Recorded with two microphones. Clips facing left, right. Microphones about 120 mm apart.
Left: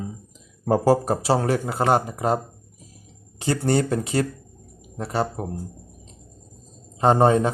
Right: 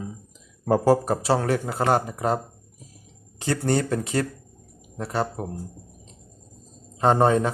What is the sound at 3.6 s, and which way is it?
Speech, 5° left (ahead or behind).